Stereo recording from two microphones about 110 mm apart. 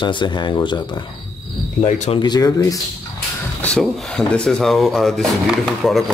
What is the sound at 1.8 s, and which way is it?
Speech, 90° left.